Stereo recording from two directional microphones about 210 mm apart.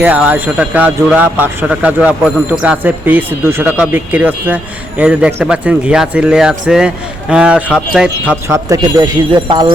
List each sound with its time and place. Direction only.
0.0 s speech: 5° right (ahead or behind)